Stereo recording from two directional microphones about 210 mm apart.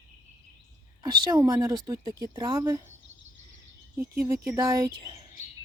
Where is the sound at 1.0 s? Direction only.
20° right (ahead or behind).